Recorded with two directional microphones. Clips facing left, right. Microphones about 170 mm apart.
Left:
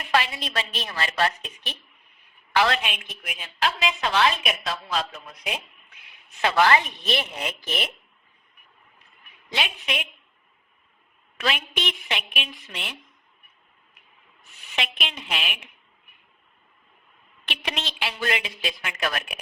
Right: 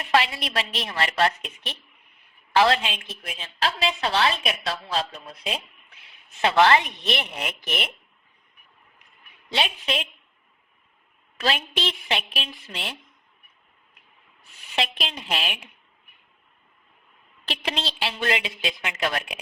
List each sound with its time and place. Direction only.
0.1 s a woman's voice: 25° right (ahead or behind)
9.5 s a woman's voice: 30° right (ahead or behind)
11.3 s a woman's voice: 30° right (ahead or behind)
14.8 s a woman's voice: 35° right (ahead or behind)
17.4 s a woman's voice: 30° right (ahead or behind)